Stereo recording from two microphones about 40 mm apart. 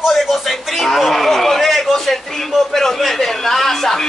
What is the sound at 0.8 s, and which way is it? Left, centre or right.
A man's voice, centre.